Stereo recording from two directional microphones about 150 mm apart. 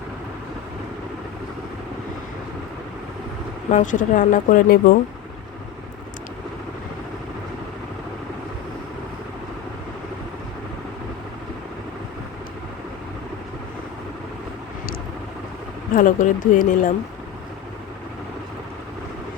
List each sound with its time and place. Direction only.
3.7 s speech: 55° left (ahead or behind)
16.0 s speech: 60° left (ahead or behind)